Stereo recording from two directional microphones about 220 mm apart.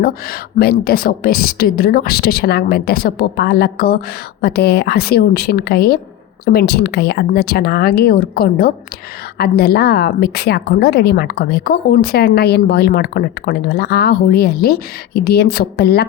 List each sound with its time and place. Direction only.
0.0 s a woman's voice: 45° left (ahead or behind)